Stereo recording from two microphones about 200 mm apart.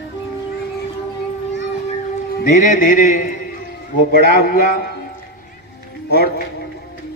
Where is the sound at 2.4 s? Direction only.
40° left (ahead or behind).